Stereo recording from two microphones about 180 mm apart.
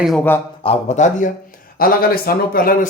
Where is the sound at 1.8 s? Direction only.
55° left (ahead or behind).